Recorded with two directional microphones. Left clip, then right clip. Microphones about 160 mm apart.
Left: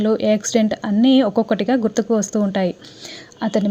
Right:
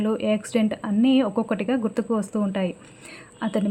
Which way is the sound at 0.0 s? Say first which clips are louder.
Left 7 dB; 25° left (ahead or behind).